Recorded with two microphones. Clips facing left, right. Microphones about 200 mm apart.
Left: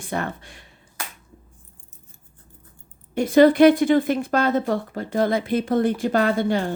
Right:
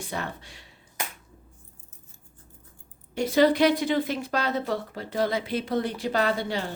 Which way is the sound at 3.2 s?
50° left (ahead or behind).